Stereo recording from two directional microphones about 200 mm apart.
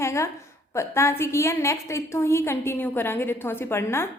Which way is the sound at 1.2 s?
15° left (ahead or behind).